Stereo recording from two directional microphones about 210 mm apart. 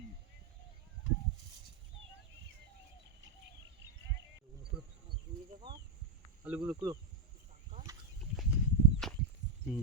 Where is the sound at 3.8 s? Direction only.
60° right (ahead or behind).